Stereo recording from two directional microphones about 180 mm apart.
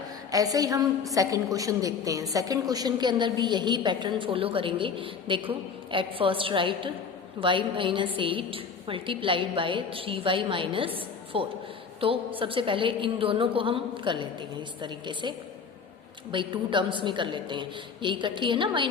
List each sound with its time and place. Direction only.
0.3 s a woman's voice: 20° right (ahead or behind)